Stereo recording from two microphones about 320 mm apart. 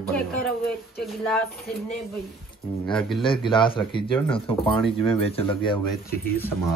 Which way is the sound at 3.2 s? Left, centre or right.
Centre.